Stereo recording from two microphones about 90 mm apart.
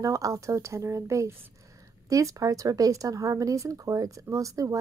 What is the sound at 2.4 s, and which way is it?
A woman's voice, 40° right (ahead or behind).